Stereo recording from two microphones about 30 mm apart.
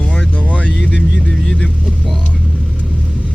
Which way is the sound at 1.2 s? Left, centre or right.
Left.